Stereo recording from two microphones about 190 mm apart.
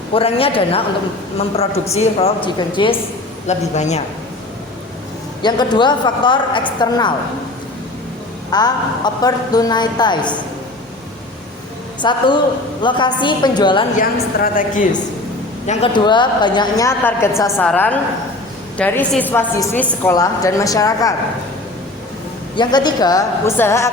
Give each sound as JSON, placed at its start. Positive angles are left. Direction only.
{"t": 0.1, "sound": "a woman's voice", "side_deg": 30}
{"t": 3.4, "sound": "a man's voice", "side_deg": 35}
{"t": 5.4, "sound": "a woman's voice", "side_deg": 20}
{"t": 8.4, "sound": "a woman's voice", "side_deg": 20}
{"t": 12.0, "sound": "a woman's voice", "side_deg": 25}
{"t": 14.0, "sound": "a woman's voice", "side_deg": 50}
{"t": 15.6, "sound": "a man's voice", "side_deg": 35}
{"t": 15.9, "sound": "a woman's voice", "side_deg": 25}
{"t": 22.5, "sound": "a woman's voice", "side_deg": 20}